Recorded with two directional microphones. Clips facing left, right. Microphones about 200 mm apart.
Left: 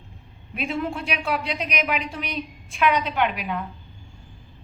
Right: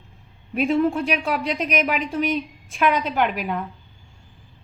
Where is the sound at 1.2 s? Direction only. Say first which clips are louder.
Right 3 dB; 45° right (ahead or behind).